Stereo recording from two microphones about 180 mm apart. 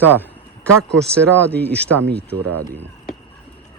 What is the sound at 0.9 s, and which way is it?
Speech, 5° left (ahead or behind).